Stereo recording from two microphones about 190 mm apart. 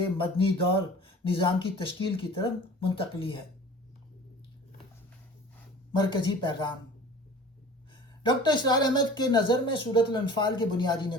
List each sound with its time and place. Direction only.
0.2 s speech: 25° left (ahead or behind)
5.9 s speech: 25° left (ahead or behind)
8.2 s speech: 25° left (ahead or behind)